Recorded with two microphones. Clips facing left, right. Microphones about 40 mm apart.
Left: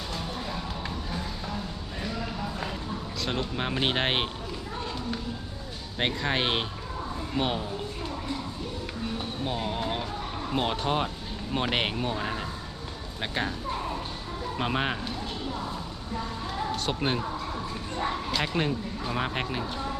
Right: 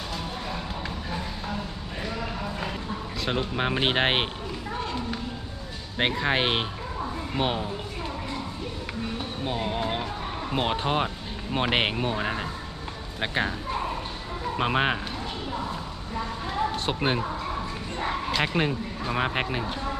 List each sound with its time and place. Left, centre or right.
2.0 s clip-clop: centre
3.2 s speech: centre
6.0 s speech: centre
9.4 s speech: centre
16.8 s speech: centre
18.3 s speech: centre